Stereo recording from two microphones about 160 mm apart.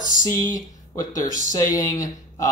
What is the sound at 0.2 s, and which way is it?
Speech, 20° left (ahead or behind).